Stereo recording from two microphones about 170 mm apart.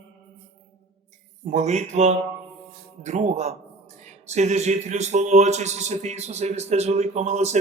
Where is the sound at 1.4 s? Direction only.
40° right (ahead or behind).